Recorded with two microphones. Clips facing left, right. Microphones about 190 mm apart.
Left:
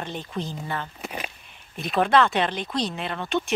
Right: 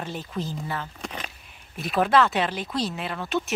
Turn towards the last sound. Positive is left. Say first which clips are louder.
# left 1 dB
turn(degrees=-5)  # may be behind; listen again after turning